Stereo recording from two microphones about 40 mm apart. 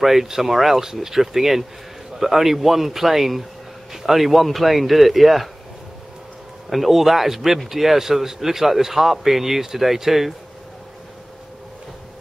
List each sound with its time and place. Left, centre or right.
0.0 s speech: centre
6.7 s speech: centre